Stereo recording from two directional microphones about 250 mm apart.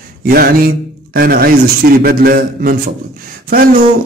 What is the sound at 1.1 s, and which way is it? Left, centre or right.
A man's voice, right.